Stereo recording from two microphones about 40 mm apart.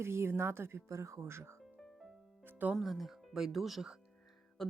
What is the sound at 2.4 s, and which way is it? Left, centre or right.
Music, right.